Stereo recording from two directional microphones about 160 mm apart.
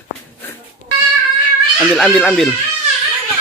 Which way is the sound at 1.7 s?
Centre (ahead or behind).